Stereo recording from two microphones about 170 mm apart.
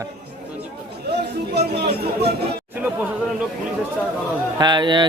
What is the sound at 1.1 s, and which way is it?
Chatter, 70° right (ahead or behind).